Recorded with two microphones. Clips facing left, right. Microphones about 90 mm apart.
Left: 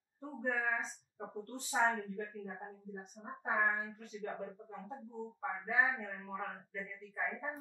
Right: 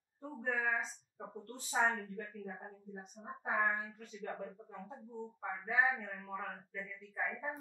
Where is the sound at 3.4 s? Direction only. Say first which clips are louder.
Left 1 dB; 15° left (ahead or behind).